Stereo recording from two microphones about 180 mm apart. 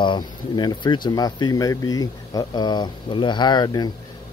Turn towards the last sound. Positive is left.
turn(degrees=20)  # may be behind; listen again after turning